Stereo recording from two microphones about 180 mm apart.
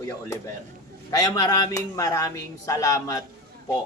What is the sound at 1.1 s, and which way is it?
Speech, 20° left (ahead or behind).